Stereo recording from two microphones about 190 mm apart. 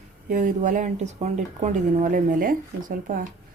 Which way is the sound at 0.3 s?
40° right (ahead or behind).